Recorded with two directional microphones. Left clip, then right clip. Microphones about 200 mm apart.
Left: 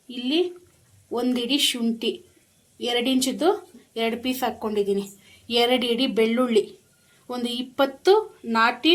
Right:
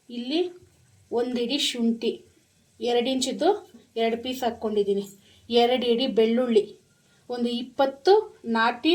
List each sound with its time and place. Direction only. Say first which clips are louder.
0.1 s speech: left 3 dB; 20° left (ahead or behind)